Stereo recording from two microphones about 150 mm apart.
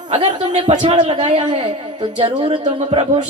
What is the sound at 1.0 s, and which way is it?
A woman's voice, 50° right (ahead or behind).